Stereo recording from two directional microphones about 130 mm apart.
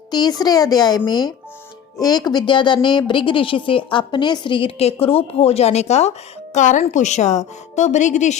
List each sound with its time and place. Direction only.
0.1 s a woman's voice: 30° left (ahead or behind); by 8.4 s 65° left (ahead or behind)